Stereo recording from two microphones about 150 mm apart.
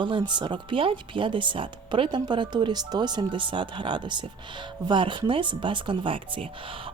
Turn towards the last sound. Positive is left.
turn(degrees=-35)  # may be behind; listen again after turning